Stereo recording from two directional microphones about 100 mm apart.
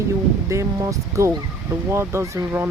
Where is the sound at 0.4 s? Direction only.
30° right (ahead or behind).